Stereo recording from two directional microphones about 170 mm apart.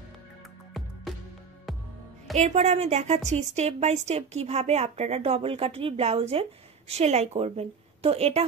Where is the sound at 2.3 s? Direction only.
40° right (ahead or behind).